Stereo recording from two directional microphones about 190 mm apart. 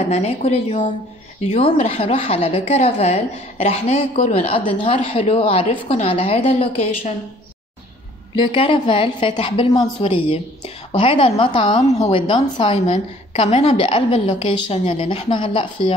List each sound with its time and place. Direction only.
0.0 s a woman's voice: 35° left (ahead or behind)
8.4 s a woman's voice: 25° left (ahead or behind)